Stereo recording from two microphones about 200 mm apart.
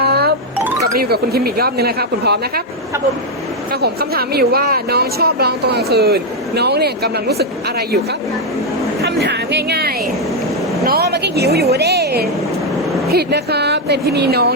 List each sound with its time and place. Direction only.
0.0 s music: 55° right (ahead or behind)
0.9 s speech: 50° right (ahead or behind)
3.7 s speech: 50° right (ahead or behind)
9.0 s speech: 55° right (ahead or behind)